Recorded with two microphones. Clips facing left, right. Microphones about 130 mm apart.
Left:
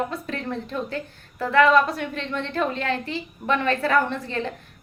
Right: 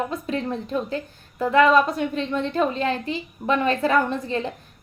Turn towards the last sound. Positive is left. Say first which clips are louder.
# right 2 dB
turn(degrees=-20)  # may be behind; listen again after turning